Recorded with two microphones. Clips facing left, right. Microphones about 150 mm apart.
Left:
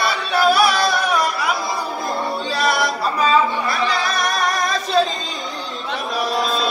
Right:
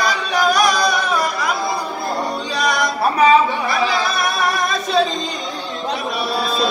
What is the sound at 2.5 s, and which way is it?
Music, 5° left (ahead or behind).